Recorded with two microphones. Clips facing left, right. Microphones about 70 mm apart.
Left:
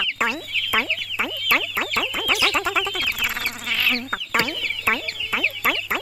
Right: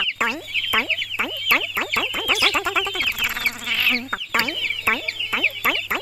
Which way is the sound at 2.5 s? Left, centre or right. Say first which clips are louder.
Even; centre.